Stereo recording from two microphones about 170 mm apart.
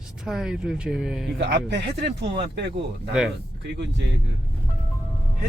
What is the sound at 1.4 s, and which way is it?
Speech, 90° right.